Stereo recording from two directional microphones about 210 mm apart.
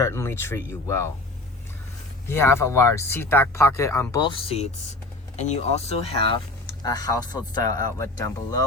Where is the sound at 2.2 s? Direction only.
10° left (ahead or behind); by 6.3 s 30° left (ahead or behind).